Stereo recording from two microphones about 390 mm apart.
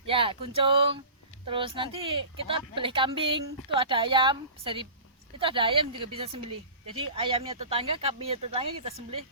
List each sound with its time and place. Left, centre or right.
0.1 s a woman's voice: centre